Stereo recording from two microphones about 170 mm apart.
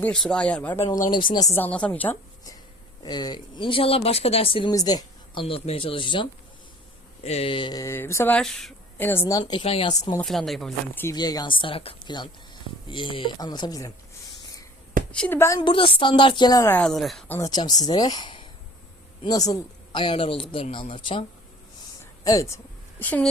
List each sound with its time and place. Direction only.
0.0 s speech: 5° left (ahead or behind)
3.0 s speech: 25° left (ahead or behind)
4.7 s speech: 20° left (ahead or behind)
9.9 s speech: 20° left (ahead or behind)
10.2 s speech: centre (ahead or behind)
11.1 s speech: 20° left (ahead or behind)
15.1 s speech: 10° left (ahead or behind)
16.7 s speech: 5° left (ahead or behind)
17.2 s speech: 15° left (ahead or behind); by 21.2 s 30° left (ahead or behind)
22.2 s a woman's voice: 20° left (ahead or behind)